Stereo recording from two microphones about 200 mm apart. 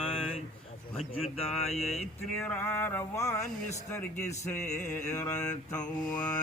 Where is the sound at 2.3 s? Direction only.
10° left (ahead or behind).